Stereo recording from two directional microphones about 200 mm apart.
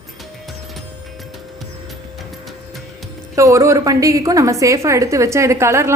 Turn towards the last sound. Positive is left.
turn(degrees=-15)  # may be behind; listen again after turning